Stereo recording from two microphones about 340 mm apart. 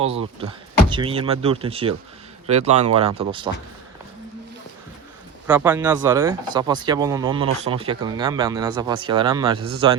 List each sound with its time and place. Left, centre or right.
0.0 s speech: centre
5.5 s speech: centre